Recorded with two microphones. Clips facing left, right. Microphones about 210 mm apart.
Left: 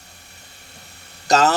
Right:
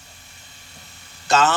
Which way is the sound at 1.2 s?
40° left (ahead or behind).